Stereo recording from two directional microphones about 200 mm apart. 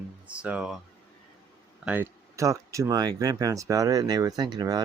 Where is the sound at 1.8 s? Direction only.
10° right (ahead or behind).